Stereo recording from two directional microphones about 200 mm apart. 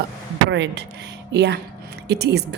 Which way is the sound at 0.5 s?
60° right (ahead or behind).